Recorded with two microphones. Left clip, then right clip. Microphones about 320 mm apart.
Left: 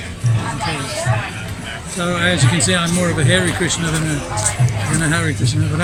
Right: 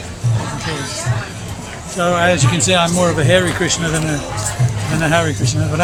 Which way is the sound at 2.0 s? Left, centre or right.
Centre.